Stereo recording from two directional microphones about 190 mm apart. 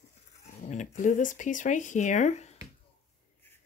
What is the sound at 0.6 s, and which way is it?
Speech, 40° left (ahead or behind).